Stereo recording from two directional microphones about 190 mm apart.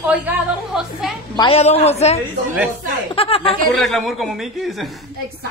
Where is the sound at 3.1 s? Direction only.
30° left (ahead or behind).